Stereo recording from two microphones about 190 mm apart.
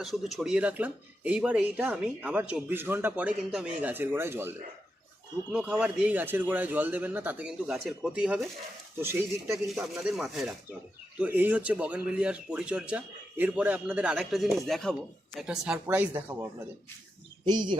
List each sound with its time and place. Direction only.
0.0 s speech: centre (ahead or behind)
9.6 s speech: centre (ahead or behind)
17.4 s speech: 25° right (ahead or behind)